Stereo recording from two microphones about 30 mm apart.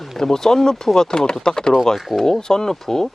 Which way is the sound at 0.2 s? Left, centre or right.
Centre.